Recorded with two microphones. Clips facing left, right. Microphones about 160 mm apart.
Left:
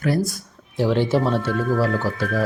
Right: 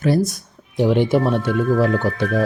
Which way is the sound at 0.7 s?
15° right (ahead or behind).